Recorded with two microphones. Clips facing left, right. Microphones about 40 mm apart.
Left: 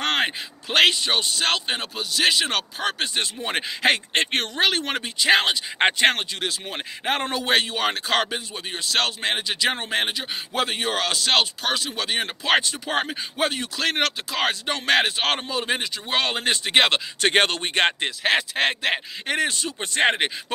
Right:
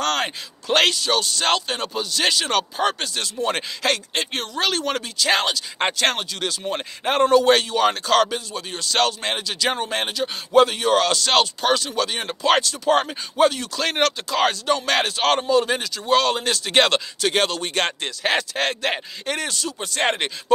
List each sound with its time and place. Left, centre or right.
0.0 s a sound: left
0.7 s speech: centre
0.9 s speech: left
1.7 s speech: centre
3.4 s speech: left
4.1 s speech: left
4.6 s speech: centre
6.7 s speech: centre
13.7 s speech: centre; by 16.7 s left
16.7 s speech: centre
17.2 s speech: left
18.2 s speech: centre